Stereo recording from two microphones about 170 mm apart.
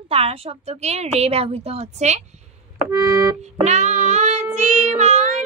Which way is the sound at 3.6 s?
45° right (ahead or behind).